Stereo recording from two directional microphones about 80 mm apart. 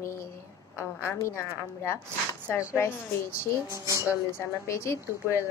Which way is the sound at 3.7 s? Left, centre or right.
Right.